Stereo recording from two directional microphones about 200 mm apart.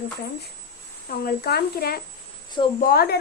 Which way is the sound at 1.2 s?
50° left (ahead or behind).